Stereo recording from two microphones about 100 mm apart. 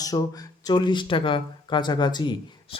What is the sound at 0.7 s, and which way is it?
Speech, 50° left (ahead or behind).